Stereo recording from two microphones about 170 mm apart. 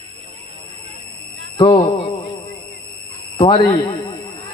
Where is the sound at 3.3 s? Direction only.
30° left (ahead or behind).